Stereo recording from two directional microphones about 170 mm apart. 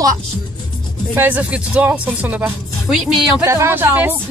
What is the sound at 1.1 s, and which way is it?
Speech, 10° right (ahead or behind).